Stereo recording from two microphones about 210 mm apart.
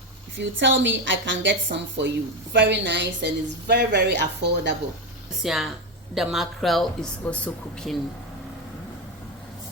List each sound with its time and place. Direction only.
0.3 s a woman's voice: 60° right (ahead or behind)
5.4 s speech: centre (ahead or behind)